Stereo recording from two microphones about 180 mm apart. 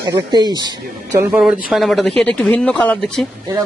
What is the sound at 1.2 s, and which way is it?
Speech, 10° right (ahead or behind).